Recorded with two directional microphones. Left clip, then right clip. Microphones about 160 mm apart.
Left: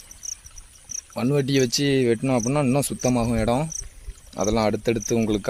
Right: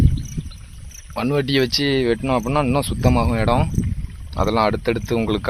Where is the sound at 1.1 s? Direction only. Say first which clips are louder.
Right 3 dB; centre (ahead or behind).